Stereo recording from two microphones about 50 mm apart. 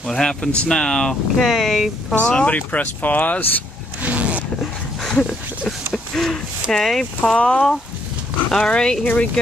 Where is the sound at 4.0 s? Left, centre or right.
Right.